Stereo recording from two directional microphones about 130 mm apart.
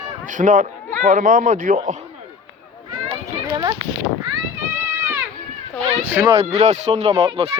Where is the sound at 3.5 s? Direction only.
35° right (ahead or behind).